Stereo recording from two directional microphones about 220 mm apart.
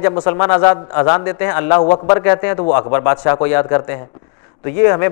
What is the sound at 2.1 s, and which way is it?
A man's voice, 15° left (ahead or behind).